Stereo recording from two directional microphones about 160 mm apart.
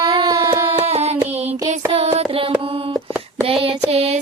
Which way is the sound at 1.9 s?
40° right (ahead or behind).